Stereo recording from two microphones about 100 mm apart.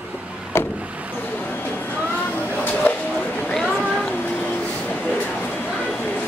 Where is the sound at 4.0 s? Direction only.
15° left (ahead or behind).